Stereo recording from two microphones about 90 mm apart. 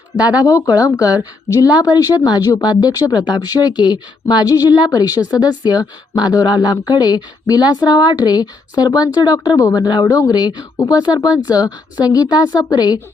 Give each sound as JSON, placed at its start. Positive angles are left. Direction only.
{"t": 0.2, "sound": "speech", "side_deg": -15}
{"t": 0.4, "sound": "a woman's voice", "side_deg": 40}